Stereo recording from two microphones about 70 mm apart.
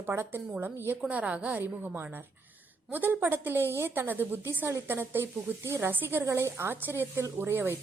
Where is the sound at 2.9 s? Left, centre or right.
Right.